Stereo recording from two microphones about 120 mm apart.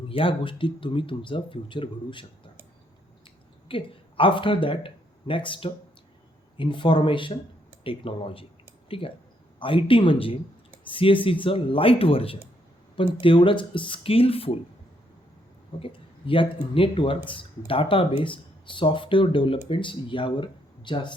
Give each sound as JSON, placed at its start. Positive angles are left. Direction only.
{"t": 0.1, "sound": "speech", "side_deg": 45}
{"t": 3.7, "sound": "speech", "side_deg": 45}
{"t": 15.8, "sound": "speech", "side_deg": 45}